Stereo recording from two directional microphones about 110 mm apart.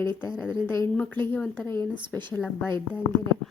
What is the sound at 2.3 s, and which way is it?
Speech, 10° left (ahead or behind).